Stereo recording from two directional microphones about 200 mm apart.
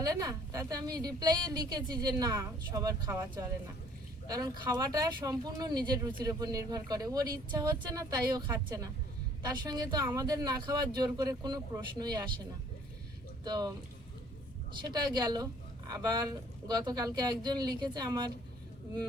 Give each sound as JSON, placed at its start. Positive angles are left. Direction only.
{"t": 0.0, "sound": "a woman's voice", "side_deg": -20}
{"t": 13.4, "sound": "a woman's voice", "side_deg": -20}
{"t": 14.8, "sound": "a woman's voice", "side_deg": -20}